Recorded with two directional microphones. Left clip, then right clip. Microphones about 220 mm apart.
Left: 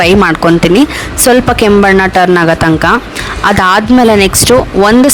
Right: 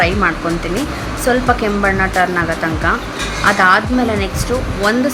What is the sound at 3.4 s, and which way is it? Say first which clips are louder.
Speech: left 4 dB; 50° left (ahead or behind).